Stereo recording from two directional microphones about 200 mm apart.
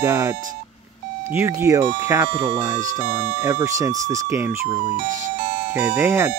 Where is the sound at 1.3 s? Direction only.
15° right (ahead or behind).